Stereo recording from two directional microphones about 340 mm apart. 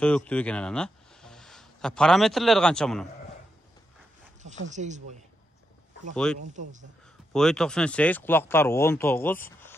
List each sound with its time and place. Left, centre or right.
0.0 s speech: centre
4.4 s speech: right
6.4 s speech: right
7.3 s speech: centre